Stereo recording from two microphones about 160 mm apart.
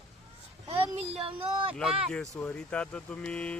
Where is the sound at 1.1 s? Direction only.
35° right (ahead or behind).